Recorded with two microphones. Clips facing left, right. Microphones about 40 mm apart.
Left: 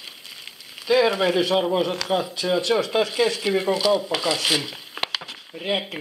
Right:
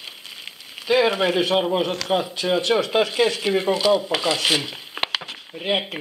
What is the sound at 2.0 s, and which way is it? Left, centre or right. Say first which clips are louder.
Speech: right 1 dB; centre.